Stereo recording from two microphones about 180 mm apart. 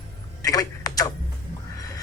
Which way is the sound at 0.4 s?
20° left (ahead or behind).